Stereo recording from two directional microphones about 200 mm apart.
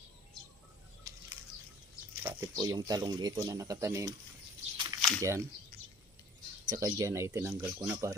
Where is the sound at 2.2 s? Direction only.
15° right (ahead or behind).